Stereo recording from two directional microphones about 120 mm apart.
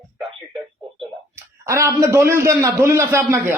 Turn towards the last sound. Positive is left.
turn(degrees=-20)  # may be behind; listen again after turning